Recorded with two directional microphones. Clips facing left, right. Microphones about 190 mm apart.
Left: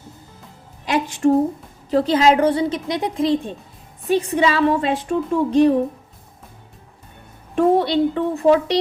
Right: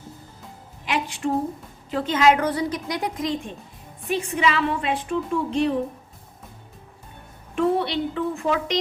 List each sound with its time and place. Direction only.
0.9 s a sound: 40° left (ahead or behind)
1.9 s a woman's voice: 35° left (ahead or behind)
7.5 s a woman's voice: 40° left (ahead or behind)